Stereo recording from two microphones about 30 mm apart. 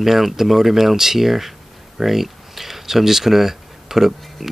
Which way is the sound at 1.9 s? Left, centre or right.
Centre.